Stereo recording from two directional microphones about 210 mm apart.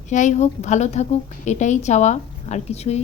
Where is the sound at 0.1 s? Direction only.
35° left (ahead or behind).